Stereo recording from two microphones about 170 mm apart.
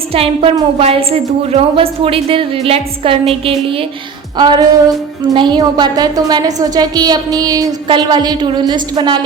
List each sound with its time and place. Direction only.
0.1 s a woman's voice: 35° right (ahead or behind)